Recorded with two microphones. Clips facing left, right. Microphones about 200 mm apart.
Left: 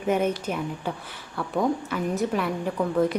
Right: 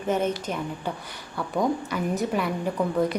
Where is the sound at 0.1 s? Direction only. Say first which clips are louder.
Left 1 dB; 10° left (ahead or behind).